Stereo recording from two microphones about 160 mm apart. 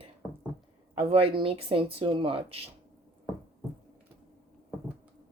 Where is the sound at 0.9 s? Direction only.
35° right (ahead or behind).